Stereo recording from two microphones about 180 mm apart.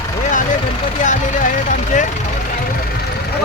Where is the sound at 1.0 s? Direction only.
45° left (ahead or behind).